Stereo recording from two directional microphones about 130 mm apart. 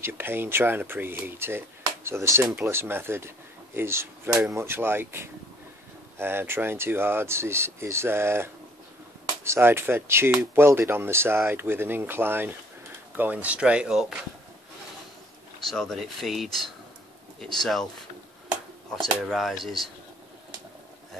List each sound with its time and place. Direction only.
0.0 s speech: 15° right (ahead or behind)
15.7 s speech: 5° left (ahead or behind)
18.9 s speech: centre (ahead or behind)